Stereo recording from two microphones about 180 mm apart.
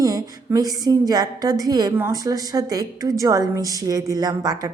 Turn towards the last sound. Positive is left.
turn(degrees=-20)  # may be behind; listen again after turning